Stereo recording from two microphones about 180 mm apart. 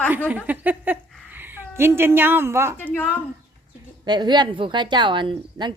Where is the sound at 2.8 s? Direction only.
10° left (ahead or behind).